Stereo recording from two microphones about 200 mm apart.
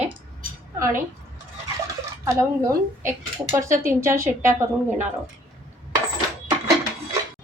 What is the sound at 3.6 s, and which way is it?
Speech, 40° right (ahead or behind).